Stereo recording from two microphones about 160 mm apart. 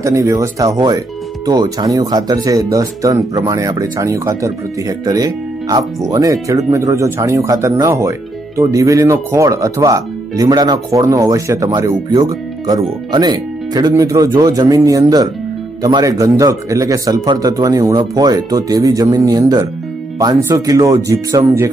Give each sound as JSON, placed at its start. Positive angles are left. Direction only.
{"t": 0.0, "sound": "speech", "side_deg": -20}